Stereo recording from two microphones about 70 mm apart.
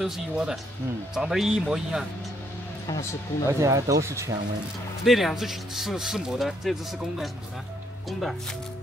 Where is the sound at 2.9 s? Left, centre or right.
Left.